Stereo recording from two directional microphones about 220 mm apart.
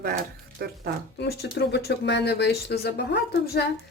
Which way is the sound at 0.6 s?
45° right (ahead or behind).